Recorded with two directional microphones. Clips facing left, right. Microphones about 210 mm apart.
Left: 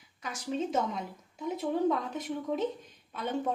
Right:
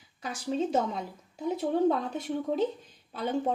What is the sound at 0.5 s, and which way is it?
A woman's voice, 35° right (ahead or behind).